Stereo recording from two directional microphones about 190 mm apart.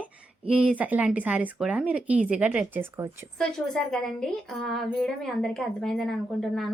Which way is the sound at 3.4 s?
5° left (ahead or behind).